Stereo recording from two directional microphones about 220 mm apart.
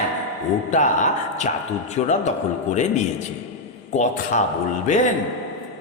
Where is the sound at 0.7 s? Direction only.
35° left (ahead or behind).